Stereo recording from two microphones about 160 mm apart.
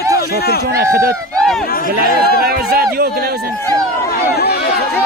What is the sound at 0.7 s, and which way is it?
Speech, 70° right (ahead or behind).